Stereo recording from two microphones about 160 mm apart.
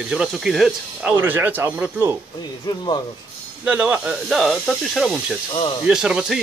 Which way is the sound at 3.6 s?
10° right (ahead or behind).